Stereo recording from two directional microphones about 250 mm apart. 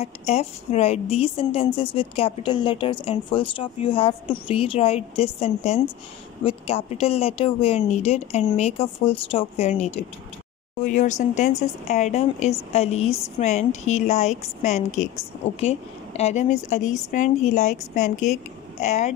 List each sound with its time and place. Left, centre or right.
0.0 s a woman's voice: left